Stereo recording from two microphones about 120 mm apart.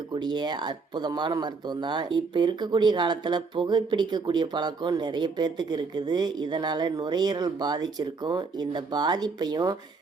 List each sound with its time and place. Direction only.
0.1 s speech: 35° right (ahead or behind)